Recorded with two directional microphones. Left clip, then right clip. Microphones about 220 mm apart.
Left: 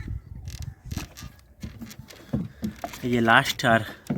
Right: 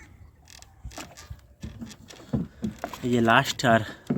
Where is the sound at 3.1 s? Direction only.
Centre (ahead or behind).